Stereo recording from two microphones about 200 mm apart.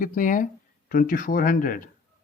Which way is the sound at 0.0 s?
40° left (ahead or behind).